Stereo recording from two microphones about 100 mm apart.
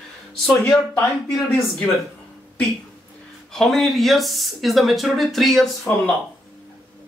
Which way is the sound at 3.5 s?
5° left (ahead or behind).